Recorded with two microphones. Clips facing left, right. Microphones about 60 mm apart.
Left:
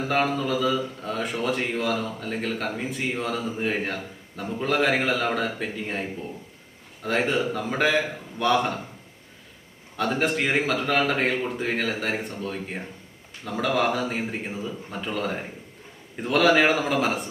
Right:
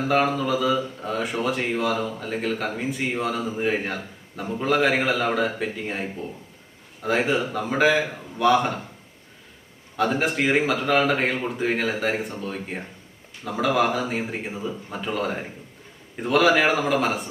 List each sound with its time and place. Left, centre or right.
0.0 s speech: centre
10.0 s speech: centre